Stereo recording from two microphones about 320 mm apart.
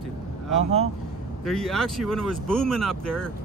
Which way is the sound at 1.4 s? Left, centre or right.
Centre.